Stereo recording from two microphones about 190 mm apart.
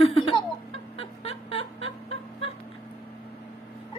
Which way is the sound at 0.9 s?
30° left (ahead or behind).